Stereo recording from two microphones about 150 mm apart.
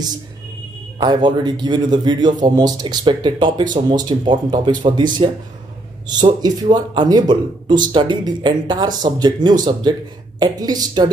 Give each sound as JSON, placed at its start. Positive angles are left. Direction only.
{"t": 0.9, "sound": "speech", "side_deg": -30}
{"t": 6.0, "sound": "speech", "side_deg": -30}